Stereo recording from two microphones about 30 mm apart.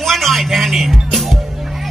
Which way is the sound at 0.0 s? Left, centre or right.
Centre.